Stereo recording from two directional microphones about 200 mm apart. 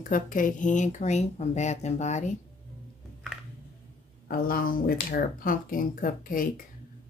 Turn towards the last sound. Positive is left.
turn(degrees=40)  # may be behind; listen again after turning